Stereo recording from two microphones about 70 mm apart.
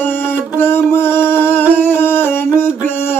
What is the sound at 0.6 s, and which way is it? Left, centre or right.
Music, left.